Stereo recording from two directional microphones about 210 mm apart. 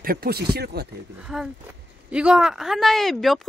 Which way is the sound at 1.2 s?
Centre (ahead or behind).